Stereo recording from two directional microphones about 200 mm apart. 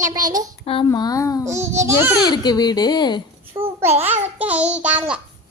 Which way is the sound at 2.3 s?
20° left (ahead or behind).